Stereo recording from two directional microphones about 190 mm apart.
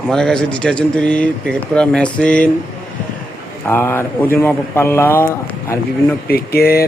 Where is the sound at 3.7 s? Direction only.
10° left (ahead or behind).